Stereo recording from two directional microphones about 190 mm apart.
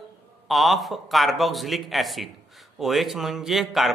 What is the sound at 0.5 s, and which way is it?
A man's voice, centre (ahead or behind).